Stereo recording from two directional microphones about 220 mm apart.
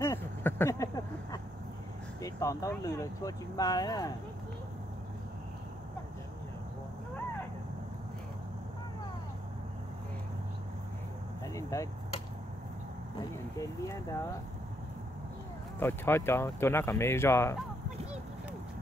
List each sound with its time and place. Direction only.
0.0 s vehicle: 10° left (ahead or behind)
2.2 s speech: 15° left (ahead or behind)
11.4 s a sound: 15° left (ahead or behind)
13.6 s speech: 15° left (ahead or behind)
15.8 s speech: 10° left (ahead or behind)